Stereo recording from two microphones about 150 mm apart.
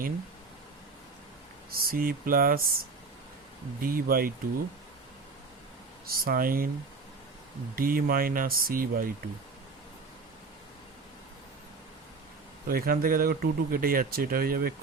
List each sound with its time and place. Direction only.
1.7 s speech: 80° right
3.8 s speech: 75° right (ahead or behind)
6.1 s speech: 75° right (ahead or behind)
7.8 s speech: 75° right (ahead or behind)
12.6 s speech: 80° right